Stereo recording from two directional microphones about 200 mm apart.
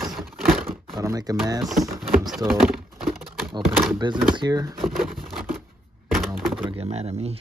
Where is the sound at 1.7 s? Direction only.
Centre (ahead or behind).